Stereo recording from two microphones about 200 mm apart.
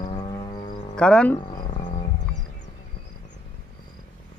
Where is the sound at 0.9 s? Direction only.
5° left (ahead or behind).